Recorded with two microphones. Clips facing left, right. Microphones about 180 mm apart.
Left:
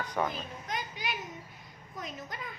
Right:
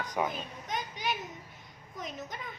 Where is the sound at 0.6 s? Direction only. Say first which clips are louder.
Right 3 dB; centre (ahead or behind).